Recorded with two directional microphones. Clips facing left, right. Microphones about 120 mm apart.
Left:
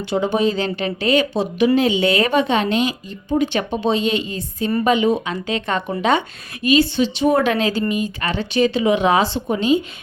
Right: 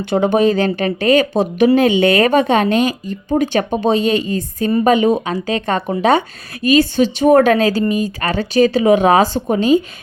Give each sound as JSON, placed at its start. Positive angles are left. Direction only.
{"t": 0.0, "sound": "a woman's voice", "side_deg": -50}